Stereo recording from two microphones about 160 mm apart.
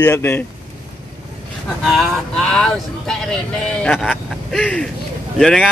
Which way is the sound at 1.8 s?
Centre (ahead or behind).